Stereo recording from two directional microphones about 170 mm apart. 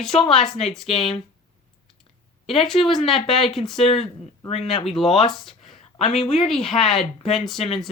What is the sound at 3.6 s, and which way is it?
Speech, 35° left (ahead or behind).